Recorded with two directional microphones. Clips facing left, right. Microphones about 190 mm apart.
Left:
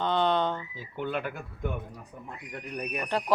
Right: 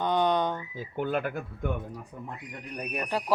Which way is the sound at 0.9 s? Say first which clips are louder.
Right 3 dB; 45° right (ahead or behind).